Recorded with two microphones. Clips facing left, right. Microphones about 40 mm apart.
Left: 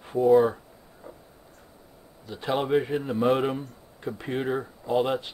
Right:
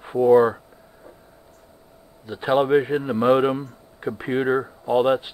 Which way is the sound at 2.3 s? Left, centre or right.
Right.